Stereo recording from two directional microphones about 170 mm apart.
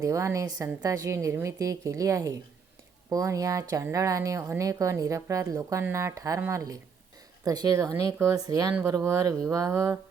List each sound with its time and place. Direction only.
0.0 s a woman's voice: 20° right (ahead or behind)